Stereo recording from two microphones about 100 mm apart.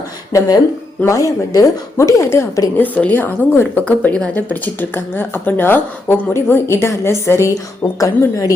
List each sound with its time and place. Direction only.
0.3 s a woman's voice: 35° left (ahead or behind)